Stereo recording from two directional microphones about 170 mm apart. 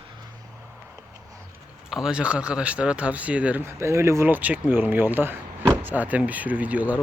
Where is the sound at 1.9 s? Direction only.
5° right (ahead or behind).